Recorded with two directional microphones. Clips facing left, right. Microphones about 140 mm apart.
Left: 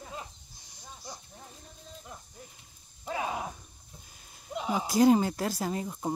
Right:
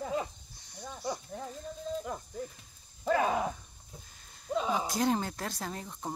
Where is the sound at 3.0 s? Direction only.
60° right (ahead or behind).